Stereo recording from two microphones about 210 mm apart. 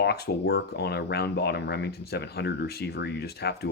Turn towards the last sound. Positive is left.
turn(degrees=50)  # may be behind; listen again after turning